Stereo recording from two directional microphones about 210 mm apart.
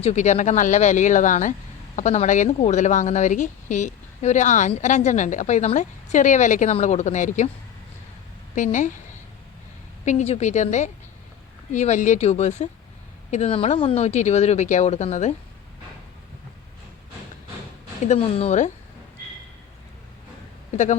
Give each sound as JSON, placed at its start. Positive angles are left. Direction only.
{"t": 0.0, "sound": "a woman's voice", "side_deg": 35}
{"t": 8.5, "sound": "a woman's voice", "side_deg": 35}
{"t": 10.1, "sound": "a woman's voice", "side_deg": 30}
{"t": 18.0, "sound": "a woman's voice", "side_deg": 30}